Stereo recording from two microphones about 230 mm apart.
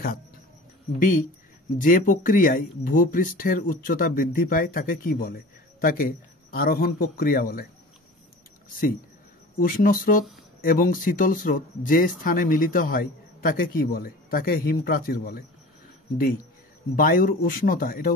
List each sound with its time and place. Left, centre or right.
0.9 s speech: left
9.6 s speech: left
16.9 s speech: left